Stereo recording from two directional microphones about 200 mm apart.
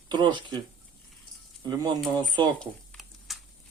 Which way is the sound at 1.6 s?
20° right (ahead or behind).